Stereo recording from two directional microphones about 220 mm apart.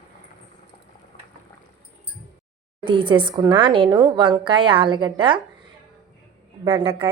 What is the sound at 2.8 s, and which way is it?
Speech, 25° right (ahead or behind).